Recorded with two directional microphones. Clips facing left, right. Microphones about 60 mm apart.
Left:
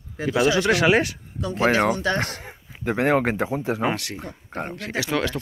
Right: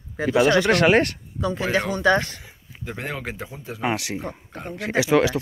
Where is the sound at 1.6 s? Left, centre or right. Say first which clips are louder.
Left 1 dB; left.